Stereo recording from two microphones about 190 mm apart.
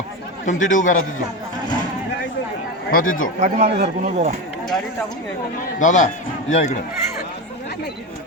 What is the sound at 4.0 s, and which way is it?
Speech, 40° right (ahead or behind).